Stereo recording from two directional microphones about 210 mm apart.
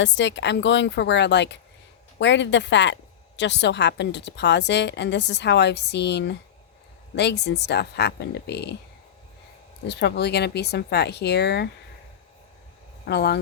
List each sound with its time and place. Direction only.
0.0 s a woman's voice: 60° left (ahead or behind)
9.8 s speech: 55° left (ahead or behind)
13.1 s speech: 50° left (ahead or behind)